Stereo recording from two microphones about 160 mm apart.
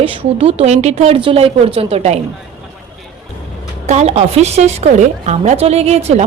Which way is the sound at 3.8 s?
45° right (ahead or behind).